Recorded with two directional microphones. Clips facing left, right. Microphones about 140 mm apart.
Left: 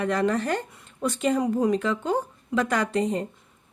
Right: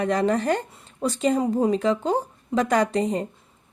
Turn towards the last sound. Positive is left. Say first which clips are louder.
# right 3 dB
turn(degrees=-35)  # may be behind; listen again after turning